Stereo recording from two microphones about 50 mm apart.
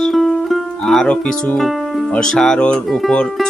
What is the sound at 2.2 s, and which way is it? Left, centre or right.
Speech, centre.